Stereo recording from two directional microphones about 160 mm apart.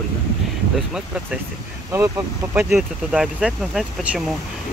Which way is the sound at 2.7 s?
5° right (ahead or behind).